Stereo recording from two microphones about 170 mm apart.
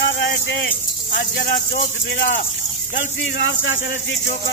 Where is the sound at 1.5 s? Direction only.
50° left (ahead or behind).